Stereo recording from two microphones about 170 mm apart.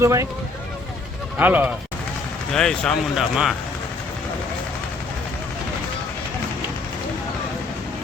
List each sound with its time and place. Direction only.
0.0 s speech: 15° right (ahead or behind)
1.4 s speech: 10° right (ahead or behind)
2.5 s speech: 5° left (ahead or behind)